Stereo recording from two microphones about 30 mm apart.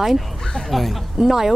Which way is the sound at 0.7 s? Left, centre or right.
Centre.